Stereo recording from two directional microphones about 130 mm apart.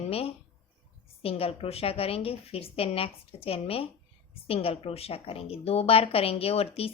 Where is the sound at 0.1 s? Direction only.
50° left (ahead or behind).